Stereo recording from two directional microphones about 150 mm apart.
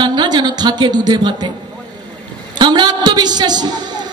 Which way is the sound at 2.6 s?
30° right (ahead or behind).